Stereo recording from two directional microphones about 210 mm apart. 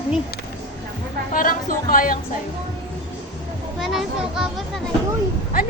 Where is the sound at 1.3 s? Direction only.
40° left (ahead or behind).